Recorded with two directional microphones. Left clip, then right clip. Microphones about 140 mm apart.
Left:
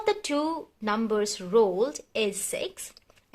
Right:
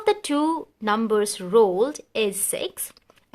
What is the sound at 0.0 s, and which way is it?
Speech, 35° right (ahead or behind).